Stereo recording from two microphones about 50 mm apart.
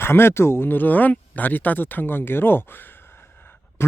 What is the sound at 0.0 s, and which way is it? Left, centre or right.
Speech, left.